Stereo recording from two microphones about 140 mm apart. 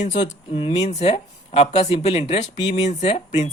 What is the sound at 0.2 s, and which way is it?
Speech, 40° left (ahead or behind).